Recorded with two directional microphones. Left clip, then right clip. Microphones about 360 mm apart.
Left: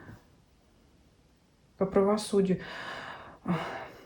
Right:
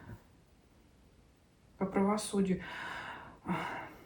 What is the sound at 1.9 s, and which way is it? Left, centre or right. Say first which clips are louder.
Speech: left 7 dB; left.